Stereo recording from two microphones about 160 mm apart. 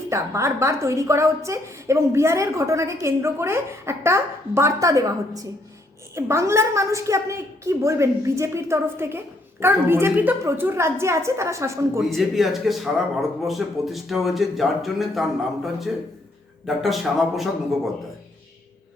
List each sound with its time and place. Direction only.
0.1 s a woman's voice: 20° right (ahead or behind)
11.9 s a man's voice: centre (ahead or behind)